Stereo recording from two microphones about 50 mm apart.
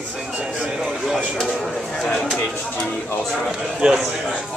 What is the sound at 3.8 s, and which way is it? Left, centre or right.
Speech, centre.